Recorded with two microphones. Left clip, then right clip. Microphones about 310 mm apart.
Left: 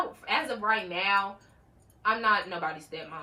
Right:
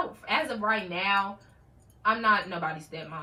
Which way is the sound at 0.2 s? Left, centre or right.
Centre.